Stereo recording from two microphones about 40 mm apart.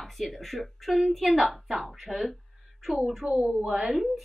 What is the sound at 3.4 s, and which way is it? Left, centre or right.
Speech, right.